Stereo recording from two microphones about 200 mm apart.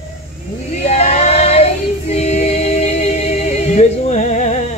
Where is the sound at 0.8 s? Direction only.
35° left (ahead or behind).